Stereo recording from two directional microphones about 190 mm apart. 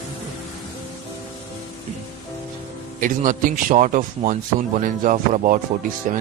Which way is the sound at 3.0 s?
45° right (ahead or behind).